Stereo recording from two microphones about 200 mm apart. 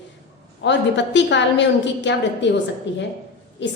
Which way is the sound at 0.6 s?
60° left (ahead or behind).